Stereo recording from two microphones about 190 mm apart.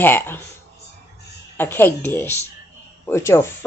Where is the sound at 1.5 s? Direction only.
10° left (ahead or behind).